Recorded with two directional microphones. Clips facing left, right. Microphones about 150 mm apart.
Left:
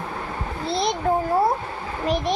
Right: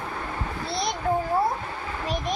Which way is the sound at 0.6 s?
25° left (ahead or behind).